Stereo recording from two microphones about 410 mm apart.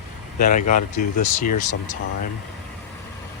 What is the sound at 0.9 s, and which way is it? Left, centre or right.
Speech, left.